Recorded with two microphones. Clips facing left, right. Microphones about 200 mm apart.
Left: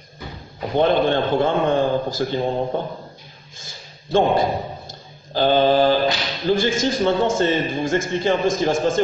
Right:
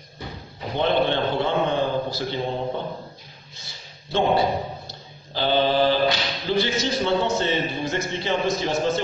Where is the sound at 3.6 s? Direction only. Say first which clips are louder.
Left 5 dB; 45° left (ahead or behind).